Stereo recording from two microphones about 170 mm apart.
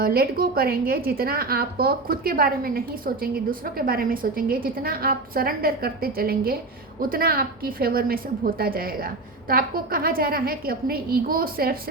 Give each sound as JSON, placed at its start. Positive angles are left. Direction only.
{"t": 0.0, "sound": "a woman's voice", "side_deg": -60}